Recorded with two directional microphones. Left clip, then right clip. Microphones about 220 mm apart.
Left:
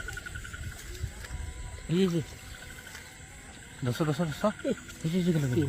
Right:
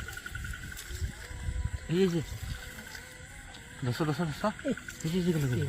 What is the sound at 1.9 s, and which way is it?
Speech, 15° left (ahead or behind).